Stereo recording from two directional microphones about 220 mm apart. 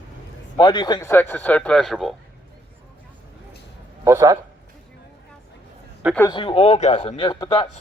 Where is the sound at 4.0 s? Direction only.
15° right (ahead or behind).